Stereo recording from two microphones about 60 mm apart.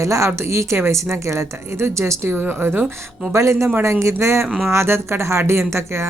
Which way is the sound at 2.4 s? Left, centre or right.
Right.